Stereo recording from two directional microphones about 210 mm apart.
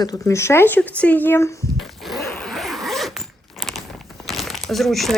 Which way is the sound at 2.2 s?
5° left (ahead or behind).